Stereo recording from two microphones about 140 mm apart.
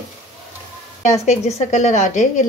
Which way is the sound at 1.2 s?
50° left (ahead or behind).